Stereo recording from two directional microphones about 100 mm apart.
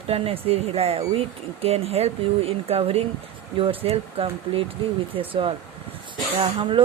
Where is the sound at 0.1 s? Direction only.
80° right.